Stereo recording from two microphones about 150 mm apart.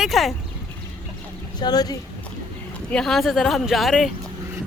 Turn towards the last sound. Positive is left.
turn(degrees=0)  # may be behind; listen again after turning